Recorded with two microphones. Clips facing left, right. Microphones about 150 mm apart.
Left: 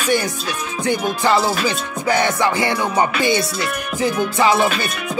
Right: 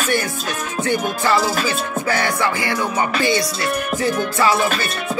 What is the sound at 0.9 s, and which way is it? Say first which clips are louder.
Music: even; 45° right (ahead or behind).